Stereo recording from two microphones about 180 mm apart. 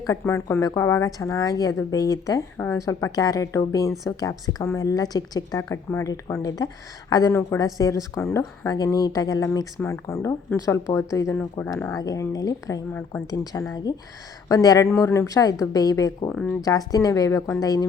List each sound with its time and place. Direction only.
0.0 s a woman's voice: 15° left (ahead or behind)
16.3 s speech: 5° left (ahead or behind)
16.6 s a woman's voice: 20° left (ahead or behind)